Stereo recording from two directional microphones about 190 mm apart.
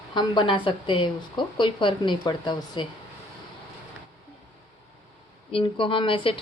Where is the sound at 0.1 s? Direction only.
25° left (ahead or behind).